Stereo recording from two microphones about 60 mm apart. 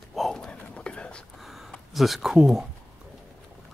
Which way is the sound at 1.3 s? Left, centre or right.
Centre.